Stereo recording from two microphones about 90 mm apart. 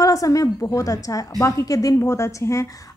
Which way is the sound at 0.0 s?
40° left (ahead or behind).